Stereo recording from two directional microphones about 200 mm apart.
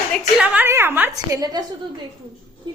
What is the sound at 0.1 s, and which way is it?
A woman's voice, 5° right (ahead or behind).